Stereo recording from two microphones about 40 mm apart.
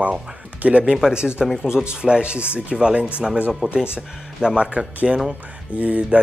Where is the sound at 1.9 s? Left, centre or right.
Right.